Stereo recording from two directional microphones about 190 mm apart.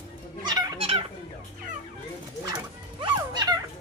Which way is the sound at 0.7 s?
30° right (ahead or behind).